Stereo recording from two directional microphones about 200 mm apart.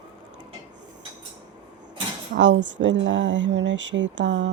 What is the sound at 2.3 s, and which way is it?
Speech, 65° right (ahead or behind).